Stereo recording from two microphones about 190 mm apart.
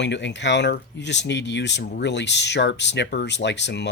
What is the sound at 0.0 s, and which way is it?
Speech, 65° left (ahead or behind).